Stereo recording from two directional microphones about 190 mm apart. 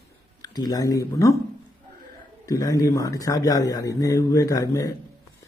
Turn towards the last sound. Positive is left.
turn(degrees=15)  # may be behind; listen again after turning